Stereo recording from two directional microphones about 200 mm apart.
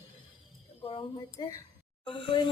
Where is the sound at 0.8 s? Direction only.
30° left (ahead or behind).